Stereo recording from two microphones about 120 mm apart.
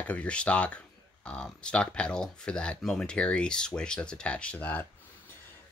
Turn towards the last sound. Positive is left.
turn(degrees=15)  # may be behind; listen again after turning